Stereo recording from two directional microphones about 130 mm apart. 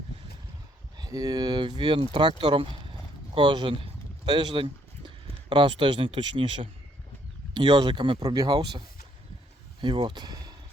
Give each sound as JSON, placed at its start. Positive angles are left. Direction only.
{"t": 0.9, "sound": "speech", "side_deg": -30}
{"t": 9.8, "sound": "speech", "side_deg": -35}